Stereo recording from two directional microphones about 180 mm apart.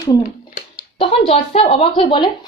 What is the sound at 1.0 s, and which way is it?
Speech, 30° left (ahead or behind).